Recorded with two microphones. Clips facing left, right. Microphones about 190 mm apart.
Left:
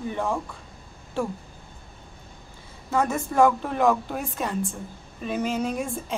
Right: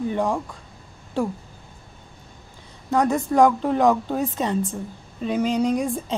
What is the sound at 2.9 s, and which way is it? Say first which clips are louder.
A woman's voice: right 4 dB; 15° right (ahead or behind).